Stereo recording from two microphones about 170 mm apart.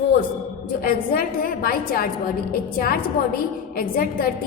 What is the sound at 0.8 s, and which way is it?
A woman's voice, 55° left (ahead or behind).